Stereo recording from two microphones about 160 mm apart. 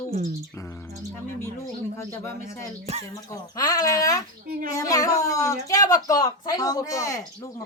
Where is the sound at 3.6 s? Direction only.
20° left (ahead or behind).